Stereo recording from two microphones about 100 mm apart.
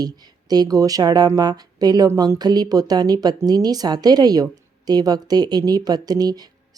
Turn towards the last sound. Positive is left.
turn(degrees=-40)  # may be behind; listen again after turning